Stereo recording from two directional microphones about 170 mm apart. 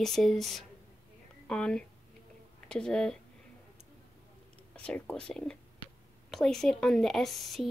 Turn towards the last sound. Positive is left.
turn(degrees=0)  # may be behind; listen again after turning